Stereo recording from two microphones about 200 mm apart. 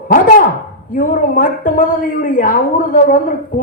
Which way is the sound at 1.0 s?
40° left (ahead or behind).